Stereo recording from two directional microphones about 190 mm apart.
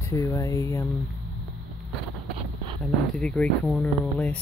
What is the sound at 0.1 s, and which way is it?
Speech, 15° left (ahead or behind).